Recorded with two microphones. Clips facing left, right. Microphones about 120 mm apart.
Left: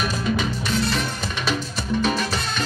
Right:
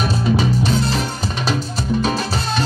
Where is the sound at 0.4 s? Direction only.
35° right (ahead or behind).